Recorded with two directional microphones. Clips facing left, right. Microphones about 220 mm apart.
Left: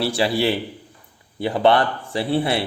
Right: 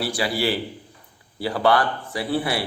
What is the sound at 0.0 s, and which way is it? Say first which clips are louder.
A man's voice: left 4 dB; 25° left (ahead or behind).